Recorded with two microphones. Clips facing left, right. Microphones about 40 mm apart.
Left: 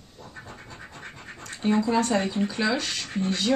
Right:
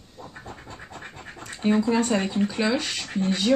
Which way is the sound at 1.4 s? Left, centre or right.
Centre.